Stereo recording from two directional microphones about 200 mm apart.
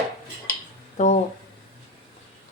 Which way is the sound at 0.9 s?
35° left (ahead or behind).